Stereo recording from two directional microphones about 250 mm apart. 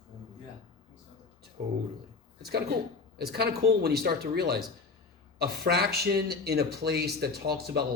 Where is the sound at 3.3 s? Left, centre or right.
Right.